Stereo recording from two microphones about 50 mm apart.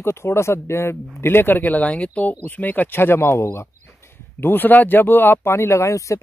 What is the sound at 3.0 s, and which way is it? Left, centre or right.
Speech, left.